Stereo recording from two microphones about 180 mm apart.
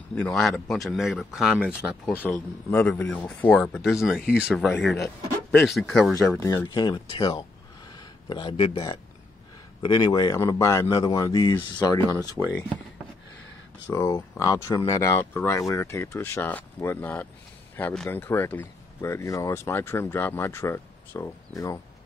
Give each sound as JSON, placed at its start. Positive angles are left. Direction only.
{"t": 0.1, "sound": "speech", "side_deg": 5}
{"t": 2.1, "sound": "speech", "side_deg": 10}
{"t": 6.4, "sound": "speech", "side_deg": 20}
{"t": 7.9, "sound": "a sound", "side_deg": 25}
{"t": 9.8, "sound": "speech", "side_deg": 25}
{"t": 12.2, "sound": "speech", "side_deg": -15}
{"t": 13.8, "sound": "speech", "side_deg": 15}